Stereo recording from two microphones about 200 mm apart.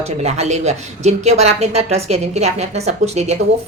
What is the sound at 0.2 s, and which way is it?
A woman's voice, 35° right (ahead or behind).